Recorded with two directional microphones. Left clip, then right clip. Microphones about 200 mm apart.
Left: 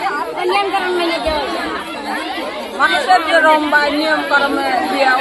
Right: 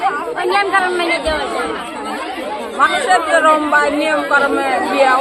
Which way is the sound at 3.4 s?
5° right (ahead or behind).